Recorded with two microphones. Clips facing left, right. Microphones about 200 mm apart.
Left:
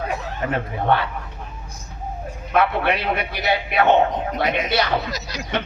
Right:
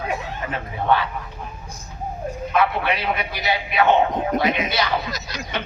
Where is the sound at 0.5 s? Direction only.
60° left (ahead or behind).